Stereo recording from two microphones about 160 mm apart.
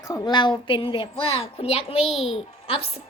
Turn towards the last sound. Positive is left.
turn(degrees=35)  # may be behind; listen again after turning